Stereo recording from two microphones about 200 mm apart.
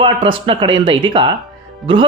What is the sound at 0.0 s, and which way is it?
Speech, 25° right (ahead or behind).